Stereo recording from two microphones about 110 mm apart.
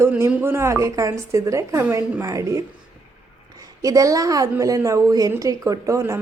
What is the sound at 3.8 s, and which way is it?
A woman's voice, 30° right (ahead or behind).